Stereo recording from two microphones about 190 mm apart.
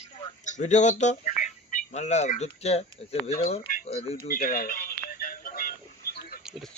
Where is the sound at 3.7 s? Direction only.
35° left (ahead or behind).